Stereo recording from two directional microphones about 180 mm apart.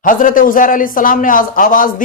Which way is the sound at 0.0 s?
50° left (ahead or behind).